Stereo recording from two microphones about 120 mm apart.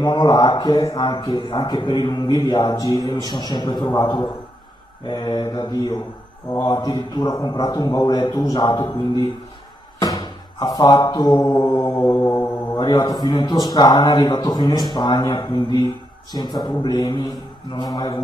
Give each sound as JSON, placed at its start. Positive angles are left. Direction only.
{"t": 0.0, "sound": "speech", "side_deg": 35}
{"t": 12.0, "sound": "mantra", "side_deg": 20}
{"t": 12.7, "sound": "speech", "side_deg": 35}